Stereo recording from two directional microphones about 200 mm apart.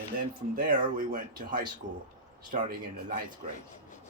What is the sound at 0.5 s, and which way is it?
Speech, 45° right (ahead or behind).